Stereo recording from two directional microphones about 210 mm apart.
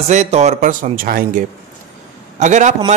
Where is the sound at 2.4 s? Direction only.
35° right (ahead or behind).